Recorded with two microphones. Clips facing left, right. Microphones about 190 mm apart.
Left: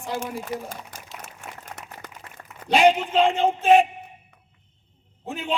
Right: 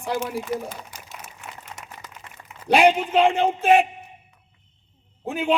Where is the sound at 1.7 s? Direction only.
55° left (ahead or behind).